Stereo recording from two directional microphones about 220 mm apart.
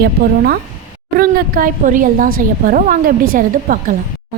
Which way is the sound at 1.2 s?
40° right (ahead or behind).